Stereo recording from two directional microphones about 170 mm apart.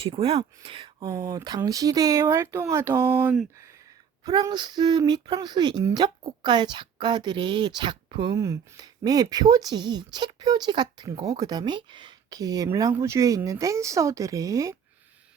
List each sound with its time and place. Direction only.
0.0 s speech: 35° right (ahead or behind)